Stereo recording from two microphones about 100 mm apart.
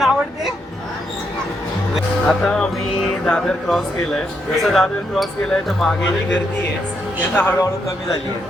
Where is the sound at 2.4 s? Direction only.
10° left (ahead or behind).